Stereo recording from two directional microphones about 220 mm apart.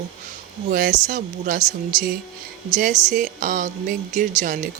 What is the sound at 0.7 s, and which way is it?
Speech, 40° right (ahead or behind).